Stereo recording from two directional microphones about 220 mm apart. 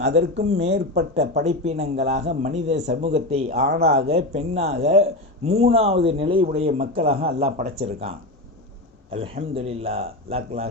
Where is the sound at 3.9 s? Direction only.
30° right (ahead or behind).